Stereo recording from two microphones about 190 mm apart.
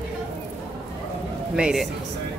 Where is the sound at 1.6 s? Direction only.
5° right (ahead or behind).